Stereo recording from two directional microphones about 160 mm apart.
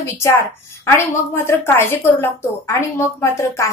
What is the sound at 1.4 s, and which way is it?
A woman's voice, 15° left (ahead or behind).